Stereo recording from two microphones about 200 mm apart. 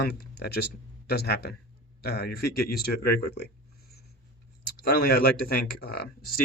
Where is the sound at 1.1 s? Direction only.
50° left (ahead or behind).